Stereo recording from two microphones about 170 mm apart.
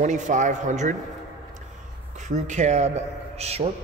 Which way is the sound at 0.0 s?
45° right (ahead or behind).